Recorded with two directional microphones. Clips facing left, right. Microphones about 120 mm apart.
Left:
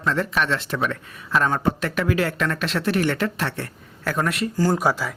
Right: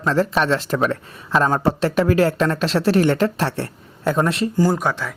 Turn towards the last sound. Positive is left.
turn(degrees=5)  # may be behind; listen again after turning